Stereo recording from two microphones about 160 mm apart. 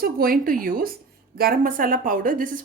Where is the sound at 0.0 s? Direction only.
65° right (ahead or behind).